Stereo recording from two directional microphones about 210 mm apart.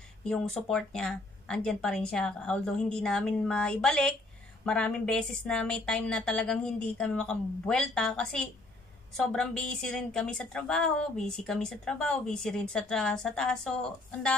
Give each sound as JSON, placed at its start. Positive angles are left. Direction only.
{"t": 0.3, "sound": "a woman's voice", "side_deg": 5}